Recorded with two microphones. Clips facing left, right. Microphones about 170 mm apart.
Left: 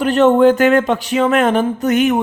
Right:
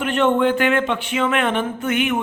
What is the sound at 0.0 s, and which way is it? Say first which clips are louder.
Speech: left 7 dB; 40° left (ahead or behind).